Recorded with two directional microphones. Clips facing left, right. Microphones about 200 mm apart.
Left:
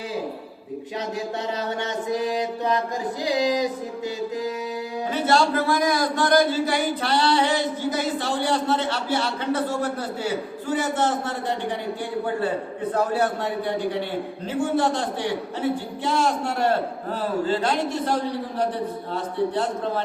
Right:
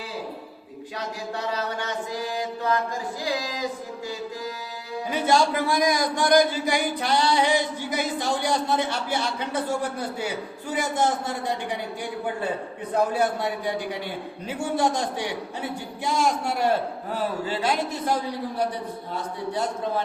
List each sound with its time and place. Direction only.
1.5 s mantra: 20° left (ahead or behind)
3.2 s speech: 20° left (ahead or behind)
5.1 s a man's voice: 15° right (ahead or behind)
10.7 s a man's voice: 10° right (ahead or behind)
12.9 s a man's voice: 15° right (ahead or behind)